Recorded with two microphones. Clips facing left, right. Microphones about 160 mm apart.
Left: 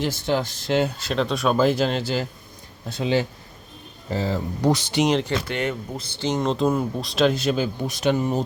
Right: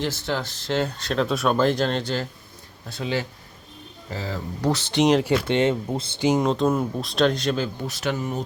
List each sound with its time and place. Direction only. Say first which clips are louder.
0.0 s speech: left 3 dB; 15° left (ahead or behind)
2.9 s speech: left 5 dB; 20° left (ahead or behind)
4.1 s speech: left 6 dB; 30° left (ahead or behind)
4.6 s speech: even; 15° left (ahead or behind)
5.5 s speech: right 6 dB; 25° right (ahead or behind)
6.1 s speech: right 2 dB; 10° right (ahead or behind); by 8.4 s 20° left (ahead or behind)